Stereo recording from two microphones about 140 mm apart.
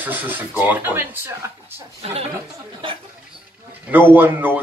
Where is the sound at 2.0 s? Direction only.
45° right (ahead or behind).